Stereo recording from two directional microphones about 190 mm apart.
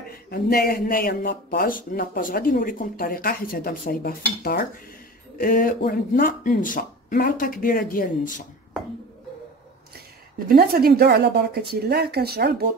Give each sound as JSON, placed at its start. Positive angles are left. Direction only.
{"t": 0.1, "sound": "speech", "side_deg": 55}
{"t": 10.5, "sound": "a woman's voice", "side_deg": -50}